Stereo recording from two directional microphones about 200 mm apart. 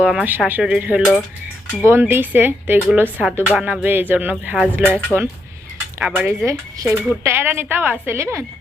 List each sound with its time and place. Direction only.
0.0 s speech: 5° right (ahead or behind)